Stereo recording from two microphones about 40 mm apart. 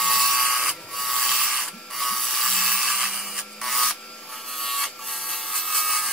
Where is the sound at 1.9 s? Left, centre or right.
Centre.